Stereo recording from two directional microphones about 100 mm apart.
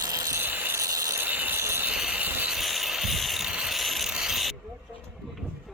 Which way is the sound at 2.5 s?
Centre (ahead or behind).